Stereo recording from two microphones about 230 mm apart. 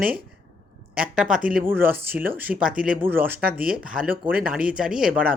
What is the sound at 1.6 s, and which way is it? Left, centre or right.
Speech, centre.